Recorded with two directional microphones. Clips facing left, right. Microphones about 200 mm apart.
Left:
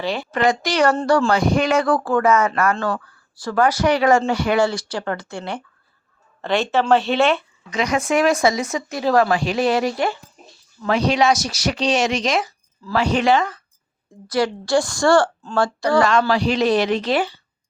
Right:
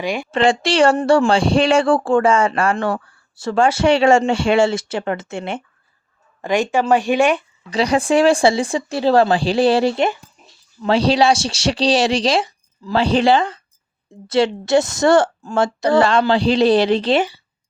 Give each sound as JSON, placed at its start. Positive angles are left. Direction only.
{"t": 0.0, "sound": "speech", "side_deg": -15}
{"t": 0.3, "sound": "speech", "side_deg": -30}
{"t": 7.7, "sound": "speech", "side_deg": -30}